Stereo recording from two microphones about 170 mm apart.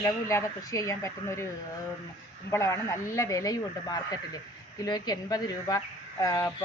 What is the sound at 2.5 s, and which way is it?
Speech, 15° left (ahead or behind).